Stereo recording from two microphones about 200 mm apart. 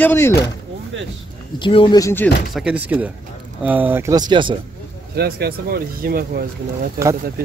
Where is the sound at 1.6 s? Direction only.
25° left (ahead or behind).